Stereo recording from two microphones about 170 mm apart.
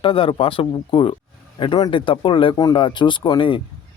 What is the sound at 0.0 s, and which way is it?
Speech, 30° left (ahead or behind).